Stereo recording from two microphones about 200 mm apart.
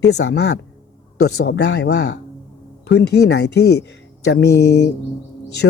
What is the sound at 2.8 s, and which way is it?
Speech, 55° left (ahead or behind).